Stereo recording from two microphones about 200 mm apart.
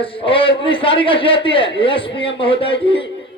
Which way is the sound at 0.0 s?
25° left (ahead or behind).